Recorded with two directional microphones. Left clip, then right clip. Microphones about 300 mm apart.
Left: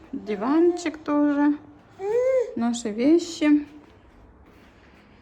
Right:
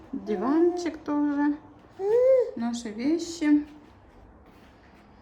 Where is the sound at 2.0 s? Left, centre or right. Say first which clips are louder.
Right 1 dB; centre.